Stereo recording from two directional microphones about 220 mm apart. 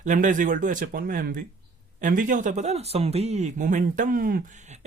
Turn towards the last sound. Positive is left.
turn(degrees=-35)  # may be behind; listen again after turning